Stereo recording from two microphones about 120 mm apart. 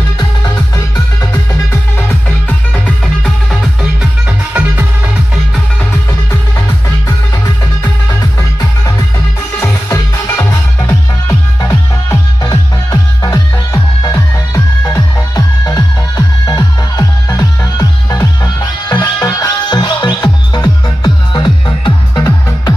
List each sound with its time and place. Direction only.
0.7 s music: 25° left (ahead or behind)
3.3 s music: 5° right (ahead or behind)
7.1 s music: 25° left (ahead or behind); by 21.9 s 40° left (ahead or behind)
22.1 s music: 25° left (ahead or behind)